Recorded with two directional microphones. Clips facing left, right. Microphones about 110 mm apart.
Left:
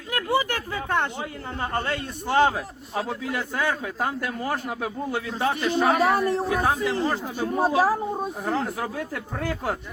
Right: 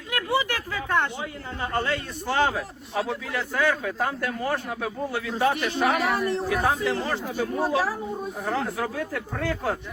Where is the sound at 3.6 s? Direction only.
20° left (ahead or behind).